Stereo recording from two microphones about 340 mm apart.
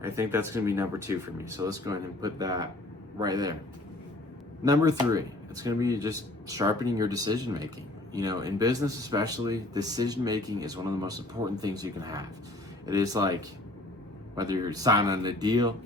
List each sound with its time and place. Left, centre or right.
0.0 s speech: centre
4.6 s speech: centre